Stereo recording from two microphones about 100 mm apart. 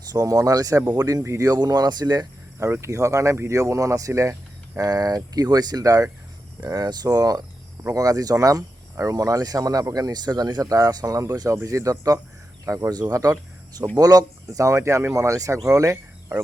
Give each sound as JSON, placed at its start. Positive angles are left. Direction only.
{"t": 0.1, "sound": "speech", "side_deg": -35}
{"t": 2.6, "sound": "speech", "side_deg": -25}